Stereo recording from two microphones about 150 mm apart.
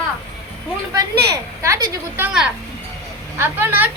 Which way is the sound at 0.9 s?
25° right (ahead or behind).